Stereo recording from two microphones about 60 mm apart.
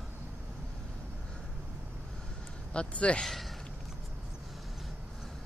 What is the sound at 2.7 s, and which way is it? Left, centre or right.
Speech, centre.